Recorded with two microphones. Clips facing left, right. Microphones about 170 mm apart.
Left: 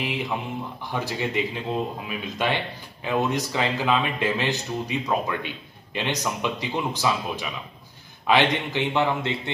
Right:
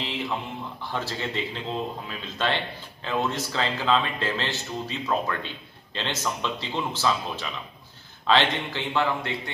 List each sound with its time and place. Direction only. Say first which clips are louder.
0.0 s a man's voice: left 2 dB; 15° left (ahead or behind)